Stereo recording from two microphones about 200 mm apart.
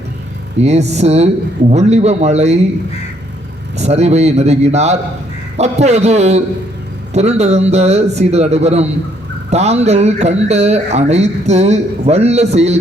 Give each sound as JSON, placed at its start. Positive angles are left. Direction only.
{"t": 0.6, "sound": "speech", "side_deg": -35}
{"t": 3.8, "sound": "speech", "side_deg": -35}